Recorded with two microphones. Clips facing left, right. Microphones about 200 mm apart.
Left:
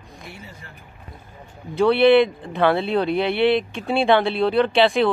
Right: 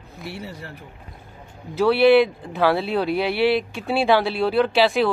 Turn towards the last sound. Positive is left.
turn(degrees=-5)  # may be behind; listen again after turning